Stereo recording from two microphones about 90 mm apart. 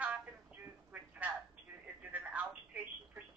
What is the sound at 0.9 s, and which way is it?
Telephone, 15° right (ahead or behind).